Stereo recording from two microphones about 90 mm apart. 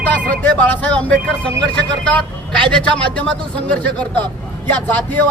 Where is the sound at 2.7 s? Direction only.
15° left (ahead or behind).